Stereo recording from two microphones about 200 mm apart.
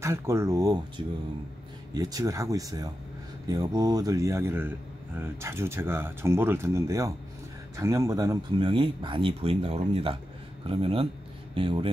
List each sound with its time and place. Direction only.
0.0 s speech: 15° right (ahead or behind)